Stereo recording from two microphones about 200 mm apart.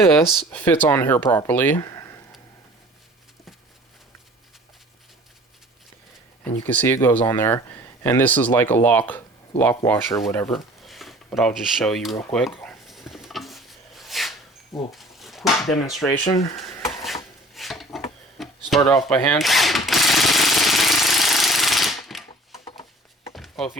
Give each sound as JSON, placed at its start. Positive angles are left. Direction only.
{"t": 0.1, "sound": "speech", "side_deg": 10}
{"t": 1.8, "sound": "a sound", "side_deg": 15}
{"t": 6.7, "sound": "speech", "side_deg": 10}
{"t": 10.5, "sound": "speech", "side_deg": 0}
{"t": 12.3, "sound": "a sound", "side_deg": 0}
{"t": 15.7, "sound": "speech", "side_deg": 0}
{"t": 16.0, "sound": "speech", "side_deg": 15}
{"t": 17.5, "sound": "a sound", "side_deg": 0}
{"t": 18.9, "sound": "speech", "side_deg": 20}
{"t": 19.1, "sound": "speech", "side_deg": 5}
{"t": 19.9, "sound": "jackhammer", "side_deg": 0}
{"t": 23.3, "sound": "a sound", "side_deg": 0}